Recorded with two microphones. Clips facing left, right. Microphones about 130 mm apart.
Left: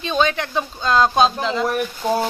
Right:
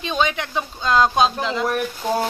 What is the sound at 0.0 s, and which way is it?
Speech, 10° right (ahead or behind).